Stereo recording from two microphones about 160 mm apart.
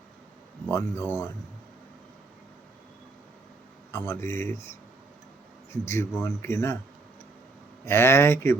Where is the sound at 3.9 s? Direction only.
15° left (ahead or behind).